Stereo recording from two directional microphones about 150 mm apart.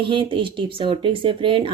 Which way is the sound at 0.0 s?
35° right (ahead or behind).